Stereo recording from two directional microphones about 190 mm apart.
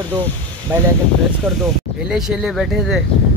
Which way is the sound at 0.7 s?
10° right (ahead or behind).